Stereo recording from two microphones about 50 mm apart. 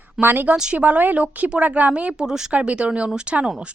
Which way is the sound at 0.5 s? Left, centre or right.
Centre.